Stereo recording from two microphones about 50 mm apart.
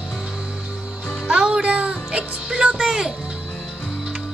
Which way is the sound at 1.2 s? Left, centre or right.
Centre.